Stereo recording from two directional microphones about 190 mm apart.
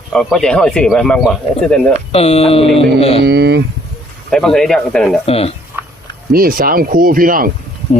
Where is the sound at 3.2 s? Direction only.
55° right (ahead or behind).